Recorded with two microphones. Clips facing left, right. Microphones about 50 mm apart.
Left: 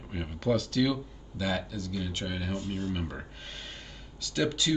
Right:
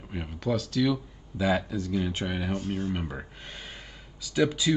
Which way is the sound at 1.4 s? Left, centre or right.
Right.